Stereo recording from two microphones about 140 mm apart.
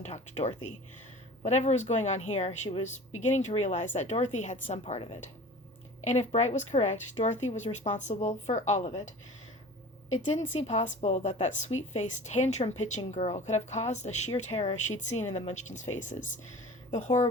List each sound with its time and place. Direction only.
0.0 s speech: 50° left (ahead or behind)
4.8 s speech: 40° left (ahead or behind)
6.1 s speech: 55° left (ahead or behind)